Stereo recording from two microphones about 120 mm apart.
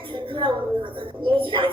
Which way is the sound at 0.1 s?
45° right (ahead or behind).